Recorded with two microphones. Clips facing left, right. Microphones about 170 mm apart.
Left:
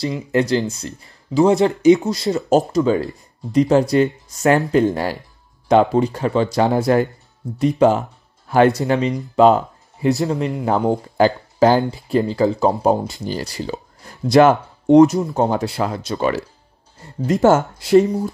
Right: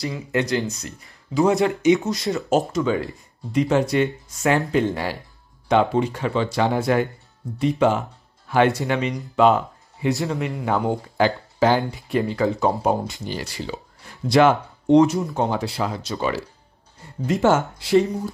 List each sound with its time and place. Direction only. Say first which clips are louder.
0.3 s speech: left 4 dB; 35° left (ahead or behind)